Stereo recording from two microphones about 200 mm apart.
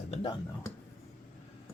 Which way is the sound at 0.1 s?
25° left (ahead or behind).